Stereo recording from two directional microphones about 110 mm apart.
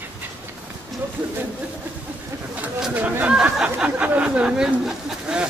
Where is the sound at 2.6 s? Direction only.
15° right (ahead or behind).